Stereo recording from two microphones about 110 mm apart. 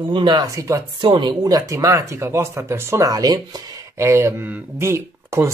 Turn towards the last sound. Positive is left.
turn(degrees=-25)  # may be behind; listen again after turning